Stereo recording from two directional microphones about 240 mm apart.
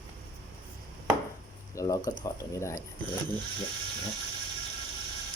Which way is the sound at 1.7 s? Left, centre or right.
Centre.